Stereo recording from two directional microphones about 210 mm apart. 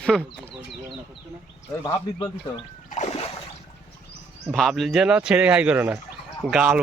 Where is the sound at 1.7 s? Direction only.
20° left (ahead or behind).